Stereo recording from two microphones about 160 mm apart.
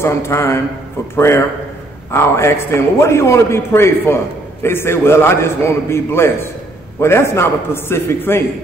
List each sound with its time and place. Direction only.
0.0 s a man's voice: 15° left (ahead or behind)